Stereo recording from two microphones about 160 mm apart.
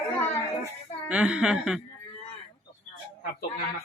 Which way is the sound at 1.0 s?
5° right (ahead or behind).